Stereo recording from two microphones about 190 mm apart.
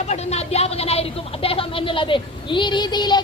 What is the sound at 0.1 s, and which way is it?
A woman's voice, 35° left (ahead or behind).